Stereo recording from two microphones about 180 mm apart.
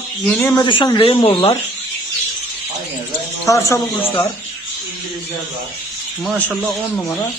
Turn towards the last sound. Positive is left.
turn(degrees=5)  # may be behind; listen again after turning